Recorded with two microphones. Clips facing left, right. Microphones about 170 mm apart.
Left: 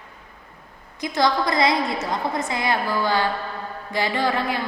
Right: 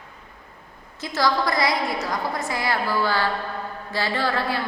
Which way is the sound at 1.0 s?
20° left (ahead or behind).